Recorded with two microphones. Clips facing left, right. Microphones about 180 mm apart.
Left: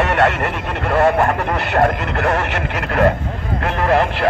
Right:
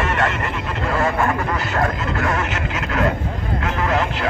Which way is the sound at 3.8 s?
55° left (ahead or behind).